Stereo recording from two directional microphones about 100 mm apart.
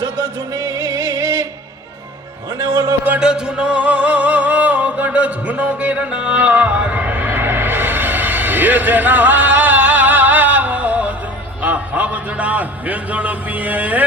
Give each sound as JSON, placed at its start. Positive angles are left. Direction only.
{"t": 0.0, "sound": "music", "side_deg": -35}
{"t": 2.6, "sound": "music", "side_deg": -35}
{"t": 3.0, "sound": "music", "side_deg": -10}
{"t": 11.6, "sound": "a sound", "side_deg": -15}